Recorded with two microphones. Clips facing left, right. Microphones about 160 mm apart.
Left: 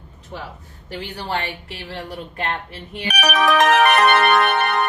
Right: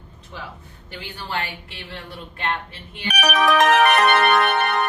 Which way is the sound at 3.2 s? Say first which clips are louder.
Left 1 dB; 75° left (ahead or behind).